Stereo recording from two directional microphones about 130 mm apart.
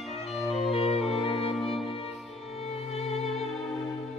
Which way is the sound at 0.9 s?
45° left (ahead or behind).